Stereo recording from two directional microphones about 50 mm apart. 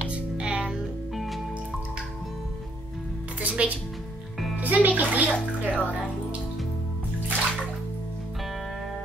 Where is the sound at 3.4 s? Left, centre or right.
Right.